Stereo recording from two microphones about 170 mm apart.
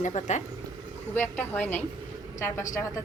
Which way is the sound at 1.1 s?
10° left (ahead or behind).